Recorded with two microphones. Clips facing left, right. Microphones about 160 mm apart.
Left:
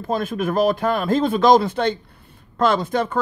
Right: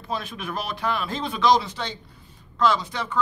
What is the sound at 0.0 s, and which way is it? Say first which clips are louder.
Speech: left 9 dB; 50° left (ahead or behind).